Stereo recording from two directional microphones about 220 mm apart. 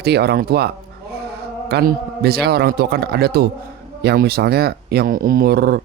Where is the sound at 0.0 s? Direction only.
45° right (ahead or behind).